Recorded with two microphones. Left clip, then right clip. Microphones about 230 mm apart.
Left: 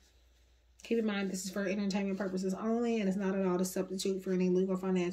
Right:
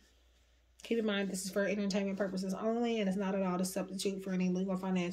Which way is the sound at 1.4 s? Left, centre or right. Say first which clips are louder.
Right 2 dB; centre.